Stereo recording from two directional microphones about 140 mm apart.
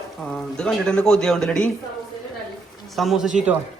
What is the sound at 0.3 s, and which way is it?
Speech, 5° left (ahead or behind).